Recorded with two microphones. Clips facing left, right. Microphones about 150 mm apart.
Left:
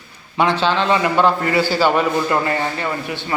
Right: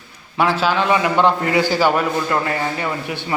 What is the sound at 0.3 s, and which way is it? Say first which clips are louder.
A man's voice: even; 5° right (ahead or behind).